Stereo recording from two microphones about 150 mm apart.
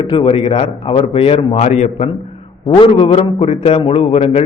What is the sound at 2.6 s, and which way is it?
A man's voice, 30° left (ahead or behind).